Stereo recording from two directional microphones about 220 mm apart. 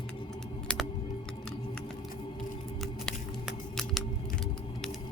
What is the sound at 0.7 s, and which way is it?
Music, 5° left (ahead or behind).